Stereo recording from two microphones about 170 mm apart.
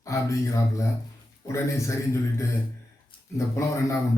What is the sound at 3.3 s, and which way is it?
Speech, 15° left (ahead or behind).